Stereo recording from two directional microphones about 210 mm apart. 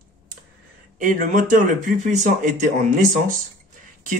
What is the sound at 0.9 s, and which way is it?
Speech, 35° right (ahead or behind).